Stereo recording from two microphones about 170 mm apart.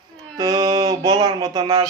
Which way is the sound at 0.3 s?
20° right (ahead or behind).